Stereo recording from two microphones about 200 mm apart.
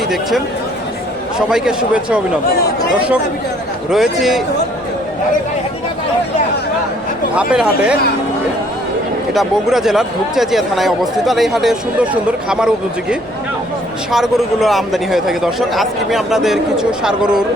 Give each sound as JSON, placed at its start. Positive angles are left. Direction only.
{"t": 0.1, "sound": "speech", "side_deg": 0}
{"t": 3.9, "sound": "speech", "side_deg": 0}
{"t": 7.5, "sound": "speech", "side_deg": -5}
{"t": 9.3, "sound": "speech", "side_deg": 0}